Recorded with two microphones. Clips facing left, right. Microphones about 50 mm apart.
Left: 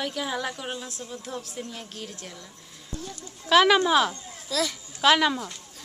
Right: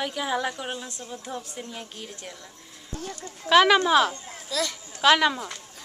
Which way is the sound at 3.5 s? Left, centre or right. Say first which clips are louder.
Right 1 dB; centre.